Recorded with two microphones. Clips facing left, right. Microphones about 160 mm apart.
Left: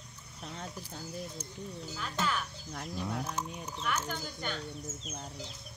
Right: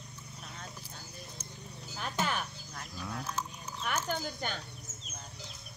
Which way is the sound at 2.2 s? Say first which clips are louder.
Even; 50° right (ahead or behind).